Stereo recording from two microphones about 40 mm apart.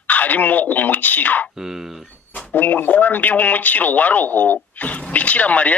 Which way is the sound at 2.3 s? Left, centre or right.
Left.